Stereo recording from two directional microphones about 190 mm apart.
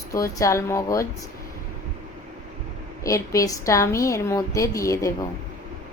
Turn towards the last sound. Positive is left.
turn(degrees=15)  # may be behind; listen again after turning